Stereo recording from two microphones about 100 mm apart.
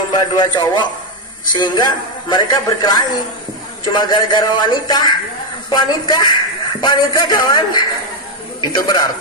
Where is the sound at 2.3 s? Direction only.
45° left (ahead or behind).